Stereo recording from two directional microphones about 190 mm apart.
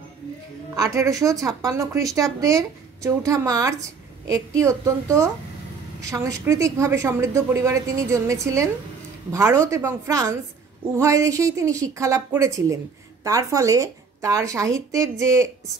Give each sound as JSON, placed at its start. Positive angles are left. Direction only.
{"t": 0.7, "sound": "speech", "side_deg": -15}